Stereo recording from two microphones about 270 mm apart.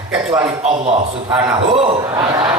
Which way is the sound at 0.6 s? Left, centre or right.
Centre.